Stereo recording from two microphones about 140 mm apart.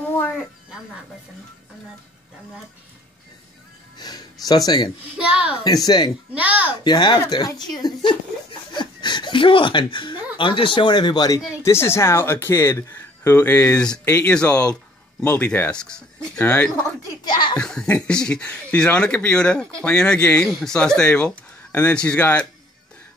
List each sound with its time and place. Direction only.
4.0 s speech: 30° left (ahead or behind)
5.1 s a woman's voice: 5° right (ahead or behind)
5.6 s speech: 30° left (ahead or behind)
6.3 s a woman's voice: 10° right (ahead or behind)
6.8 s speech: 30° left (ahead or behind); by 14.0 s 5° left (ahead or behind)
14.0 s speech: 20° left (ahead or behind)
14.3 s speech: 10° left (ahead or behind)
17.2 s speech: 30° left (ahead or behind)
17.6 s speech: 5° left (ahead or behind)